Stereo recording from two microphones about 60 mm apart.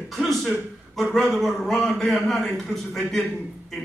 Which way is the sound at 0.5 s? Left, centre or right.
Centre.